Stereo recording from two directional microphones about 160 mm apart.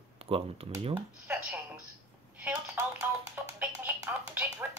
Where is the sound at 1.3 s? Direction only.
15° right (ahead or behind).